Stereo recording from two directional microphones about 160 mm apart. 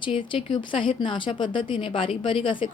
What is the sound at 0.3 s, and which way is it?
A woman's voice, 30° left (ahead or behind).